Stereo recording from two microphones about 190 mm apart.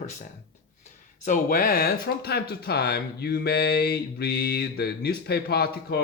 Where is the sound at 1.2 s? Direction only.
45° left (ahead or behind).